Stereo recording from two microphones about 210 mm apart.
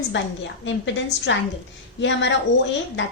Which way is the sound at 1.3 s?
60° left (ahead or behind).